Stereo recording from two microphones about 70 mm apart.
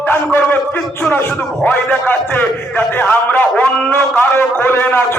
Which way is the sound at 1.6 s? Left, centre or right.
Left.